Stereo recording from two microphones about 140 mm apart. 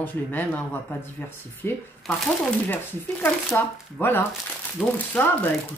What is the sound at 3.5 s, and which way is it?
Speech, 15° left (ahead or behind).